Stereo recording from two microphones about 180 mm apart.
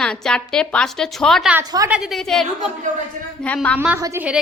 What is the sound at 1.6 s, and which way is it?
Speech, 20° right (ahead or behind).